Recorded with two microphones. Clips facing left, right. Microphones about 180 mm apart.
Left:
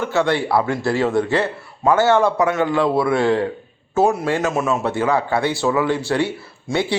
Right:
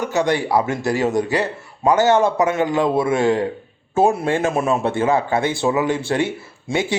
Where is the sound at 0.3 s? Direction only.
15° right (ahead or behind).